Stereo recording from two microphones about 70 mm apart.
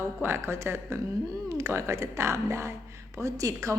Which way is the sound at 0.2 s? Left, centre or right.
Right.